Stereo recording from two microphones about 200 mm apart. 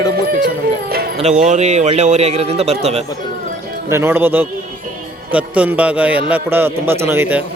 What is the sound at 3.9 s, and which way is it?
Speech, 10° right (ahead or behind).